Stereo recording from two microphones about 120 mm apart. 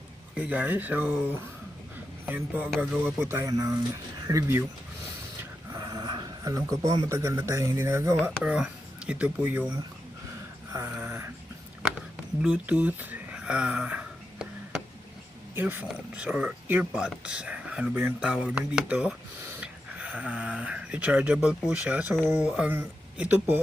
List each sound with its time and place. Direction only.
0.3 s speech: 10° right (ahead or behind)
2.6 s speech: centre (ahead or behind)
3.0 s speech: 15° right (ahead or behind)
5.4 s dog: 25° right (ahead or behind)
7.1 s speech: 25° right (ahead or behind)
8.2 s speech: 10° right (ahead or behind)
10.7 s a sound: 25° right (ahead or behind)
11.8 s a sound: 10° right (ahead or behind)
15.5 s speech: 15° right (ahead or behind)